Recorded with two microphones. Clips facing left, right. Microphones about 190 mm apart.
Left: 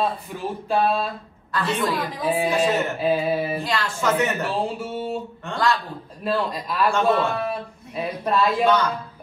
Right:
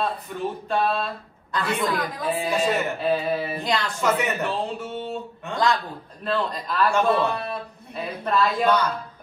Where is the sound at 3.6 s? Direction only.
15° right (ahead or behind).